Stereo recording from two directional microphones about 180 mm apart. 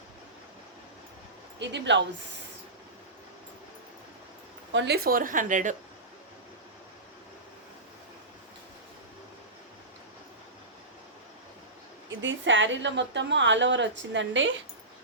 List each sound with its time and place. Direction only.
1.5 s a woman's voice: 75° right (ahead or behind)
4.7 s a woman's voice: 80° right; by 5.7 s 45° right (ahead or behind)
12.2 s a woman's voice: 90° right